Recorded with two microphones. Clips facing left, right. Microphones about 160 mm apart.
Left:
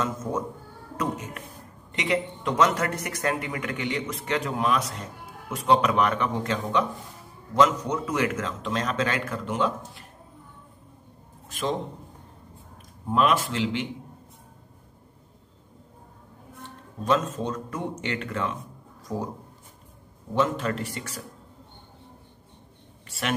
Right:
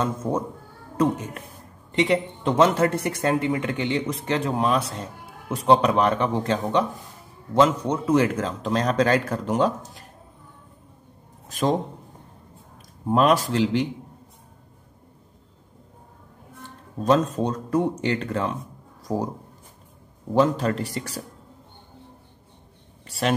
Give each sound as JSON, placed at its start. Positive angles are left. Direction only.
{"t": 0.0, "sound": "speech", "side_deg": -30}
{"t": 1.9, "sound": "speech", "side_deg": -30}
{"t": 11.4, "sound": "a sound", "side_deg": -40}
{"t": 13.1, "sound": "speech", "side_deg": -40}
{"t": 17.0, "sound": "speech", "side_deg": -35}
{"t": 20.3, "sound": "speech", "side_deg": -35}
{"t": 23.0, "sound": "a sound", "side_deg": -35}